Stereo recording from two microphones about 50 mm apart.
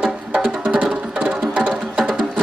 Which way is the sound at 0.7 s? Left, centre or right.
Right.